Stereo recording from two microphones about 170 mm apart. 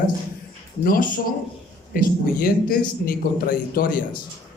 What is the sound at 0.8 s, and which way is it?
A man's voice, 60° left (ahead or behind).